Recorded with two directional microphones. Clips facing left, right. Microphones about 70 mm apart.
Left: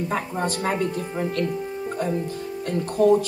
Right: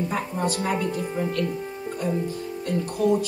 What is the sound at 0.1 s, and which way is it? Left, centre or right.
Speech, left.